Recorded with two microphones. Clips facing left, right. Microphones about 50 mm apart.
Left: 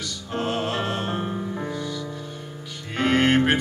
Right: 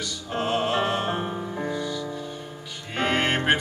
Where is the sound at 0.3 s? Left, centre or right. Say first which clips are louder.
Right 1 dB; centre.